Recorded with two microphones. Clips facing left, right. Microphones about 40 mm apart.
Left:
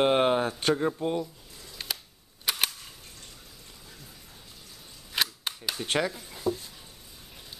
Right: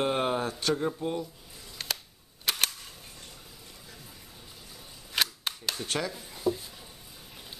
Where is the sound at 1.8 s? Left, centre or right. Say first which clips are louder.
Right 1 dB; centre.